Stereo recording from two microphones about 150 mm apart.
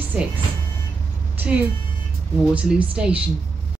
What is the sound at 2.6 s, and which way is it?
Speech, 5° right (ahead or behind).